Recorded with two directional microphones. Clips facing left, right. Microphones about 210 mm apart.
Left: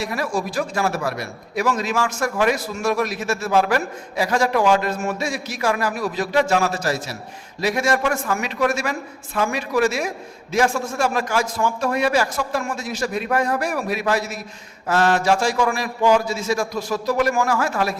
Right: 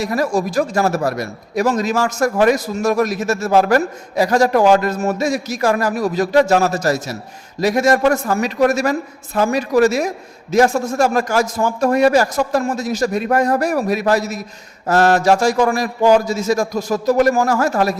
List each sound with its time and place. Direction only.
0.0 s a man's voice: 40° right (ahead or behind)